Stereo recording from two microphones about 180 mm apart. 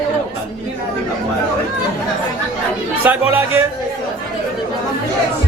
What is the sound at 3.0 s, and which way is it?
Speech, 10° right (ahead or behind).